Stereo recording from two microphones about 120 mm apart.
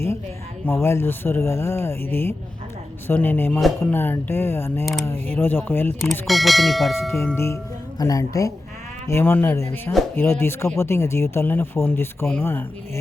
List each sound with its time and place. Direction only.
0.6 s speech: 20° left (ahead or behind)
6.0 s speech: centre (ahead or behind)
7.1 s speech: 20° left (ahead or behind)